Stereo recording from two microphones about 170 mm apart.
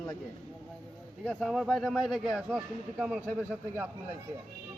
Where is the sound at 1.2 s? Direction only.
Centre (ahead or behind).